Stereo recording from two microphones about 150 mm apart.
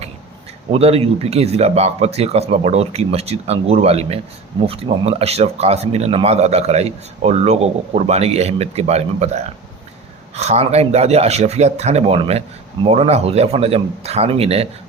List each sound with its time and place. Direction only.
0.7 s speech: 40° right (ahead or behind)